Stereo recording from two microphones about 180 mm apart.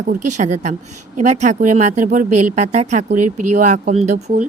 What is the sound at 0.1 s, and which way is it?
Speech, 40° right (ahead or behind).